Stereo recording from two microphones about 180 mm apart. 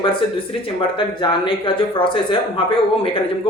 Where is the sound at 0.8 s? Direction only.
25° left (ahead or behind).